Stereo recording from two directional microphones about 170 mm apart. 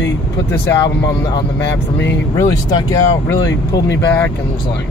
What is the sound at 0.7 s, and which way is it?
Speech, 25° left (ahead or behind).